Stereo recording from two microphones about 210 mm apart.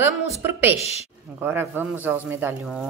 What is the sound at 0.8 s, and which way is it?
Speech, 30° left (ahead or behind).